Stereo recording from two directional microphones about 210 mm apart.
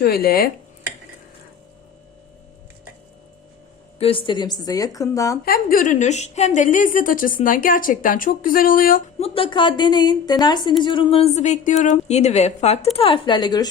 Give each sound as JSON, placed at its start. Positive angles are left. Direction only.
{"t": 0.0, "sound": "speech", "side_deg": 50}
{"t": 3.9, "sound": "a woman's voice", "side_deg": 25}
{"t": 5.5, "sound": "a woman's voice", "side_deg": 40}
{"t": 9.1, "sound": "a woman's voice", "side_deg": 25}